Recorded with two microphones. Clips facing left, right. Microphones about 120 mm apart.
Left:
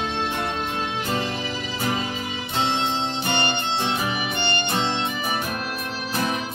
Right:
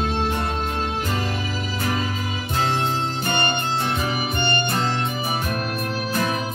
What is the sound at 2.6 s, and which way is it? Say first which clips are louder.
Music: right 1 dB; 45° right (ahead or behind).